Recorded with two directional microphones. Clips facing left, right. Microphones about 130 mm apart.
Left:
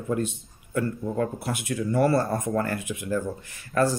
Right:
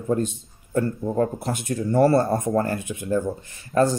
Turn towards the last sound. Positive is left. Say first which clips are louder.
# right 3 dB
turn(degrees=-25)  # may be behind; listen again after turning